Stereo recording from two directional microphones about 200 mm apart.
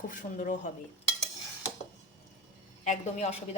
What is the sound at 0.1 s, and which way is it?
Speech, 40° left (ahead or behind).